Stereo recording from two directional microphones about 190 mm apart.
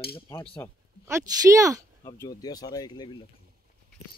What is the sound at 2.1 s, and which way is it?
Speech, 20° left (ahead or behind).